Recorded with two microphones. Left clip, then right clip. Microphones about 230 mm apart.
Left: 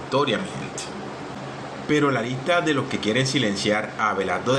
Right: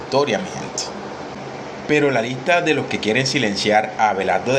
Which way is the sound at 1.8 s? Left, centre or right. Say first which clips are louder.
Right 4 dB; right.